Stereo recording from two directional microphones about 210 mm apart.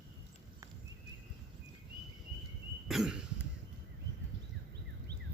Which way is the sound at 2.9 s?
5° right (ahead or behind).